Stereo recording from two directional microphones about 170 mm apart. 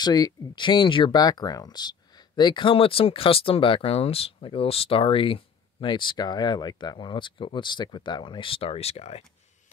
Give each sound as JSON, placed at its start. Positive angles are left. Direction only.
{"t": 0.0, "sound": "speech", "side_deg": 25}